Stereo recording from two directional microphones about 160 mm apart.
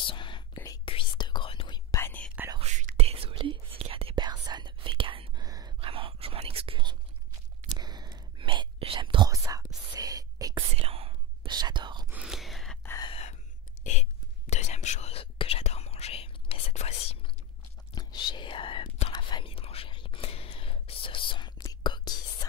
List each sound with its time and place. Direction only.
0.0 s whispering: 30° left (ahead or behind)
2.0 s whispering: 10° left (ahead or behind)
2.6 s whispering: 50° right (ahead or behind); by 5.8 s 25° right (ahead or behind)
5.8 s whispering: 35° right (ahead or behind)
9.9 s a sound: 25° right (ahead or behind)
10.7 s whispering: 40° right (ahead or behind)
12.1 s whispering: 5° right (ahead or behind)
12.8 s a sound: 20° left (ahead or behind)
13.1 s gasp: 45° left (ahead or behind)
14.5 s whispering: 45° left (ahead or behind)
17.9 s whispering: 25° left (ahead or behind)